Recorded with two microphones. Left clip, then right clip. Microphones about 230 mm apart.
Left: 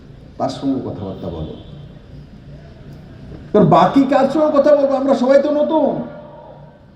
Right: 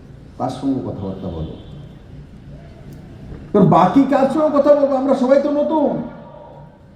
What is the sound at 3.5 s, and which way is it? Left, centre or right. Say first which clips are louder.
A man's voice: left 1 dB; left.